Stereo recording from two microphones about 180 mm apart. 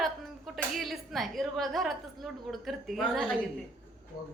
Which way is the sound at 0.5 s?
Centre (ahead or behind).